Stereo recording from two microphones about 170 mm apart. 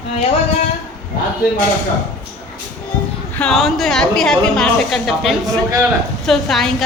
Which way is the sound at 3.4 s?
Centre (ahead or behind).